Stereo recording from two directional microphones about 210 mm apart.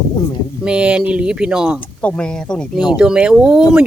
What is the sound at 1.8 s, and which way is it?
Speech, 5° left (ahead or behind).